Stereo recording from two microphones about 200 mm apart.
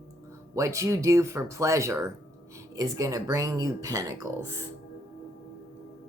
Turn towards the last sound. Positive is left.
turn(degrees=-15)  # may be behind; listen again after turning